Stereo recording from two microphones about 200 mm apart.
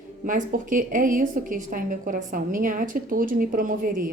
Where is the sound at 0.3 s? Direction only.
40° right (ahead or behind).